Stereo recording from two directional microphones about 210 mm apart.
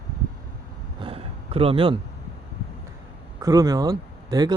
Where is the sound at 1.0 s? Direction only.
25° right (ahead or behind).